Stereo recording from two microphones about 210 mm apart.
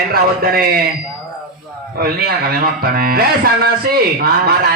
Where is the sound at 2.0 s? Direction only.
45° right (ahead or behind).